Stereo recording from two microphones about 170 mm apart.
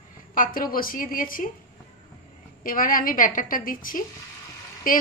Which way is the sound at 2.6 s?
55° left (ahead or behind).